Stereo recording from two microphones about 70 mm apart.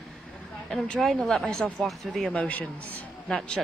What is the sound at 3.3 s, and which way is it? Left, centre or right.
Speech, centre.